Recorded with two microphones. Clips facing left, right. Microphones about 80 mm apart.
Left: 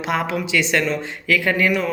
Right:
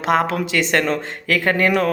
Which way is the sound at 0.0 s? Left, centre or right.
Right.